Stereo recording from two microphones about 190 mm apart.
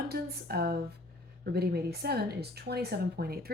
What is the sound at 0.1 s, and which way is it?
Speech, 55° right (ahead or behind).